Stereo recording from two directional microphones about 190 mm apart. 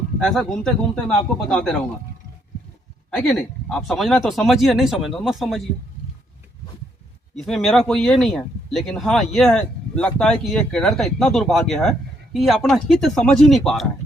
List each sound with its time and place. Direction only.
0.2 s speech: centre (ahead or behind)
3.1 s speech: 5° left (ahead or behind)
7.3 s speech: centre (ahead or behind)